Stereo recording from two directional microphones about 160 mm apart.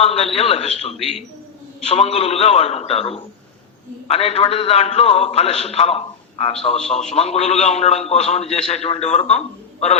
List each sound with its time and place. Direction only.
0.0 s a man's voice: 40° left (ahead or behind)